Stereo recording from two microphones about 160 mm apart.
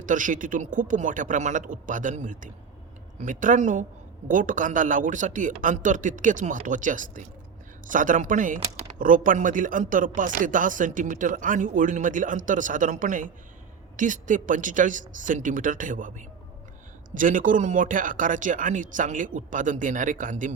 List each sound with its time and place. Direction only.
0.0 s speech: 55° right (ahead or behind)